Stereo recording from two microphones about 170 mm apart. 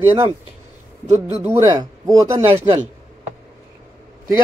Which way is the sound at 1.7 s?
20° right (ahead or behind).